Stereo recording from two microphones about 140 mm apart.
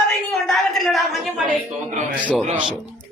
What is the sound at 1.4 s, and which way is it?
Speech, 60° right (ahead or behind).